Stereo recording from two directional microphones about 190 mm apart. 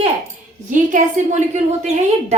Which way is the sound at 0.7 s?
45° right (ahead or behind).